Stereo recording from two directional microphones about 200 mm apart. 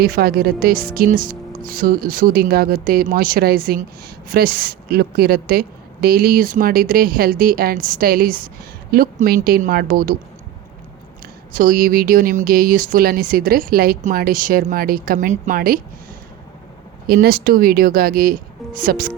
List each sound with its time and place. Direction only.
0.0 s speech: 50° right (ahead or behind)
11.5 s speech: 45° right (ahead or behind)
17.1 s speech: 50° right (ahead or behind)